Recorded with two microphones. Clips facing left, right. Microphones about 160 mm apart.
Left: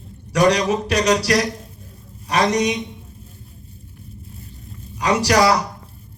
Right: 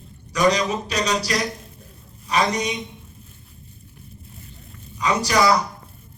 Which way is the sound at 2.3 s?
80° left.